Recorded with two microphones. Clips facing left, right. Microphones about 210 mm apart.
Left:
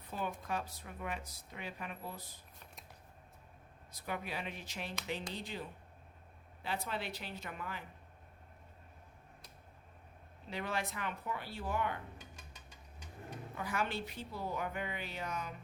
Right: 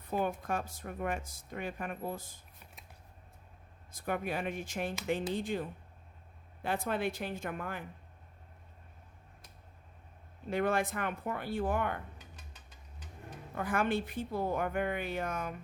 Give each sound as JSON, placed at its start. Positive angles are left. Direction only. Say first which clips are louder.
{"t": 0.1, "sound": "speech", "louder": "right 6 dB", "side_deg": -50}
{"t": 3.9, "sound": "speech", "louder": "right 6 dB", "side_deg": -50}
{"t": 10.5, "sound": "speech", "louder": "right 8 dB", "side_deg": -50}
{"t": 13.6, "sound": "speech", "louder": "right 7 dB", "side_deg": -50}